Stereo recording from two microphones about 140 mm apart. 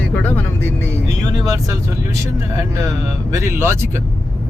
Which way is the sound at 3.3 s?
20° right (ahead or behind).